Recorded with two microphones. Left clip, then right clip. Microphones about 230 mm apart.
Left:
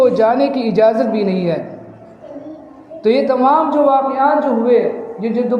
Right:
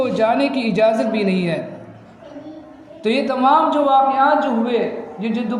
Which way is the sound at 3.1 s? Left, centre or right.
Right.